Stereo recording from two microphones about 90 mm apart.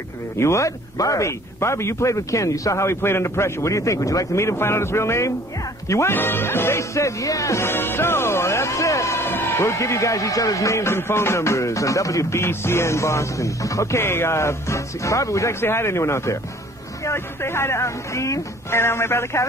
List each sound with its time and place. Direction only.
0.4 s speech: 35° left (ahead or behind)